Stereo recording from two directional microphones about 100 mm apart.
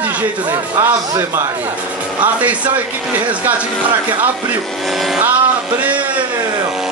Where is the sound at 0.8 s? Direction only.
30° right (ahead or behind).